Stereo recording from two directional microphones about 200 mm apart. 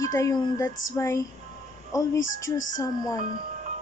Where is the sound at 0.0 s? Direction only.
15° left (ahead or behind).